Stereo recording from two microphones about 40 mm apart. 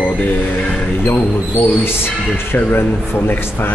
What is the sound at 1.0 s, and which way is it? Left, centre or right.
A man's voice, left.